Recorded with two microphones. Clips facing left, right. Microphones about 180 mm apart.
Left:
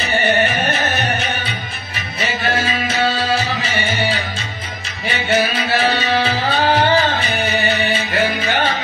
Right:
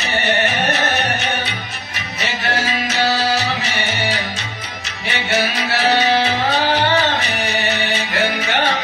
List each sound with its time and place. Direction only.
0.0 s music: 75° right (ahead or behind)
3.3 s music: 75° right (ahead or behind)
5.1 s music: 75° right (ahead or behind)